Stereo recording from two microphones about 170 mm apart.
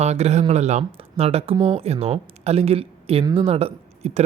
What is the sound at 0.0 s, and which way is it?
Speech, 40° right (ahead or behind).